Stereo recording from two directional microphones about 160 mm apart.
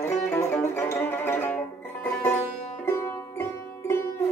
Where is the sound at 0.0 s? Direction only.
15° left (ahead or behind).